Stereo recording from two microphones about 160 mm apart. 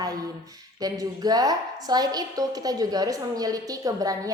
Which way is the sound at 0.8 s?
25° right (ahead or behind).